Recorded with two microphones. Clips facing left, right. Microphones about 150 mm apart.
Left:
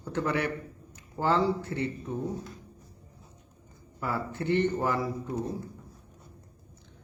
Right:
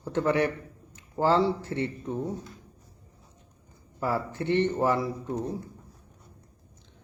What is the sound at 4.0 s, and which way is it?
Speech, 25° right (ahead or behind).